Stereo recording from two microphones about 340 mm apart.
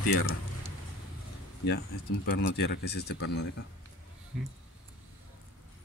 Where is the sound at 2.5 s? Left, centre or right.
Left.